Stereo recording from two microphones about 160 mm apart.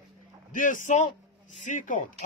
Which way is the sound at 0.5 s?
55° left (ahead or behind).